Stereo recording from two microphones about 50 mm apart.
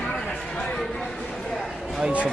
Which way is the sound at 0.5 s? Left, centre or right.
Centre.